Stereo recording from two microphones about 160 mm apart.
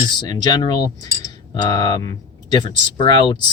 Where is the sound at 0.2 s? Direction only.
25° left (ahead or behind).